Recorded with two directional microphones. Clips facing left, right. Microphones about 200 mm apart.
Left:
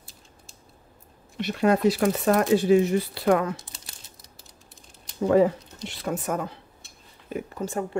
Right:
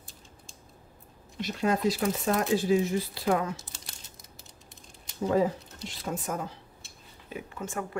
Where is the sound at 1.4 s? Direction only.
65° left (ahead or behind).